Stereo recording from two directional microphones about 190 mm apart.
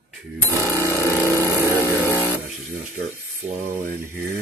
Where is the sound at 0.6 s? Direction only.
15° left (ahead or behind).